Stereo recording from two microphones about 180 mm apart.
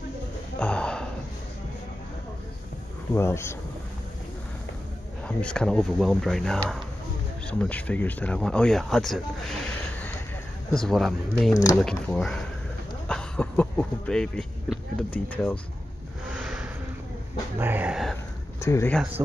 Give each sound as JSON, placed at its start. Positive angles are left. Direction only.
{"t": 0.6, "sound": "a sound", "side_deg": 5}
{"t": 3.2, "sound": "speech", "side_deg": 15}
{"t": 5.2, "sound": "speech", "side_deg": 5}
{"t": 10.7, "sound": "speech", "side_deg": 0}
{"t": 11.5, "sound": "speech", "side_deg": 15}
{"t": 11.8, "sound": "speech", "side_deg": 5}
{"t": 16.3, "sound": "vehicle", "side_deg": -5}
{"t": 17.6, "sound": "dog", "side_deg": -10}
{"t": 18.6, "sound": "speech", "side_deg": 15}